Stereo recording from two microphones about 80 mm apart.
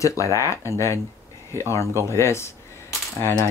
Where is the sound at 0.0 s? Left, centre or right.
Left.